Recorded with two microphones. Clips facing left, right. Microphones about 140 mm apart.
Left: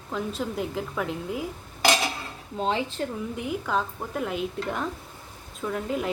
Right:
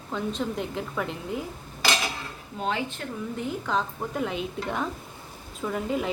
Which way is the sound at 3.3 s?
10° left (ahead or behind).